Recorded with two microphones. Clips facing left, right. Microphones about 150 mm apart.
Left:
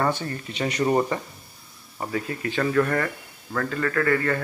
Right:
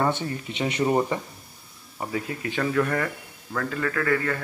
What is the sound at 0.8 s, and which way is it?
A man's voice, 10° right (ahead or behind).